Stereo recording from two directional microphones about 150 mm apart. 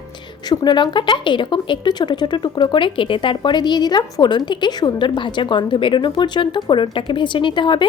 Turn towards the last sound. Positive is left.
turn(degrees=30)  # may be behind; listen again after turning